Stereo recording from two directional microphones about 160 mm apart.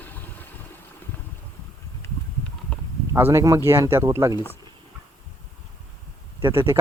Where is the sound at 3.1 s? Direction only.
15° right (ahead or behind).